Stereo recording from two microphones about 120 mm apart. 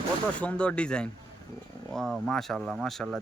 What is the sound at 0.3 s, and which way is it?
Speech, 10° left (ahead or behind).